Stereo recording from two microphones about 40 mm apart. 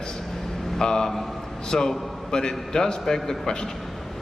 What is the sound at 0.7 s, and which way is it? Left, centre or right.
A man's voice, centre.